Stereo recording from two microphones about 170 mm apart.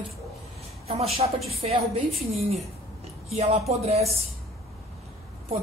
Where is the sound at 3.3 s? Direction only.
40° right (ahead or behind).